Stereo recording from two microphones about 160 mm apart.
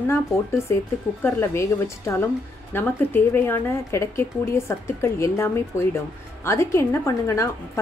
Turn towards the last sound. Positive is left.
turn(degrees=20)  # may be behind; listen again after turning